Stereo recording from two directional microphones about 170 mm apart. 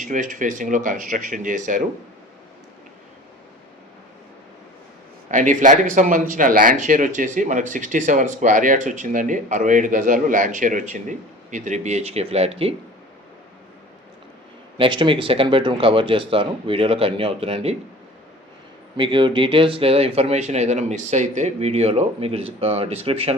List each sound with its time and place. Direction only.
0.0 s speech: 50° right (ahead or behind)
5.3 s speech: 50° right (ahead or behind)
14.8 s speech: 30° right (ahead or behind)
18.9 s speech: 30° right (ahead or behind)